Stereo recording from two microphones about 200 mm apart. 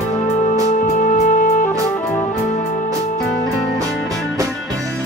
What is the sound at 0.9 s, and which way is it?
Music, 40° left (ahead or behind).